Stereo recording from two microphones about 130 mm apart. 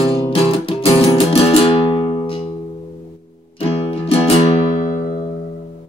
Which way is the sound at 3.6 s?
50° left (ahead or behind).